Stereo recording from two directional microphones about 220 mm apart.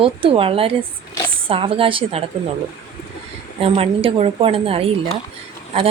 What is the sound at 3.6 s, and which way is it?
Speech, 25° right (ahead or behind).